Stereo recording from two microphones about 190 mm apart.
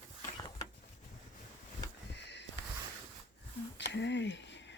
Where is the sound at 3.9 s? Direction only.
70° left (ahead or behind).